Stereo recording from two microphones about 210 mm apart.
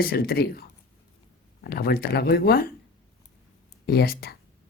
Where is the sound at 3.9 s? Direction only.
45° left (ahead or behind).